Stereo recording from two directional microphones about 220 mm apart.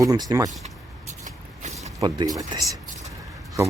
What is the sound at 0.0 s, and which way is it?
Speech, 15° right (ahead or behind).